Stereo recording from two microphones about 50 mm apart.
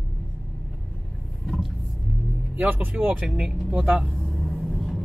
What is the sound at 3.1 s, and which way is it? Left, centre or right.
Speech, centre.